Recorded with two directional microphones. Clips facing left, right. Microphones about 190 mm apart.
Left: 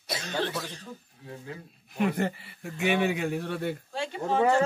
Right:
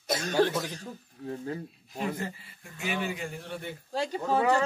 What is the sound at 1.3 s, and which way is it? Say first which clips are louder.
Speech: right 6 dB; 35° right (ahead or behind).